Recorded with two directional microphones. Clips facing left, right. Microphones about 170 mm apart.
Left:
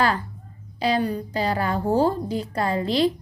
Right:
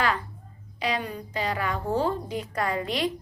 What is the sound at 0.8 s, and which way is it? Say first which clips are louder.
A woman's voice: left 7 dB; 35° left (ahead or behind).